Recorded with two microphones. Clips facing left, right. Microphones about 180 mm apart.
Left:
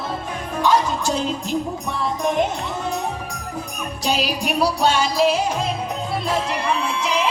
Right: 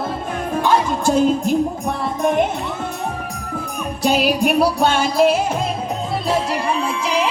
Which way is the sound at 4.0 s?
55° right (ahead or behind).